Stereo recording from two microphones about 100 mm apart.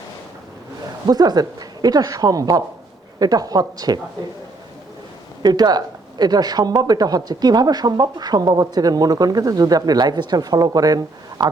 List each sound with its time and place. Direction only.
1.0 s speech: 40° right (ahead or behind)
5.4 s speech: 45° right (ahead or behind)